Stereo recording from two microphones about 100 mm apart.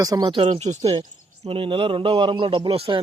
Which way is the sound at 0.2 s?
60° right (ahead or behind).